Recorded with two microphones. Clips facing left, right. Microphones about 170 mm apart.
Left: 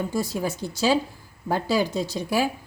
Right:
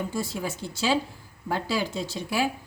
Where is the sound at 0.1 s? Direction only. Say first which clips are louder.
Left 4 dB; 40° left (ahead or behind).